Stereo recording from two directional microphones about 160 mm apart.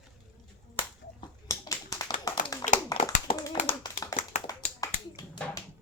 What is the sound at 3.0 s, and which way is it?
Clapping, 55° left (ahead or behind).